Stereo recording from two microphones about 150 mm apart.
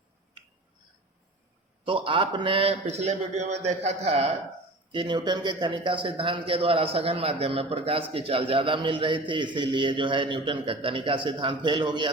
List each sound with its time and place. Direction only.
1.8 s a man's voice: 35° right (ahead or behind)
4.9 s a man's voice: 30° right (ahead or behind)